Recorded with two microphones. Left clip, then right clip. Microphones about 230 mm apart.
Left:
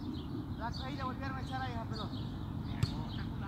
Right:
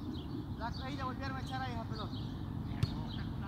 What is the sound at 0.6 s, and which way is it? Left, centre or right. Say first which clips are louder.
Vehicle: even; right.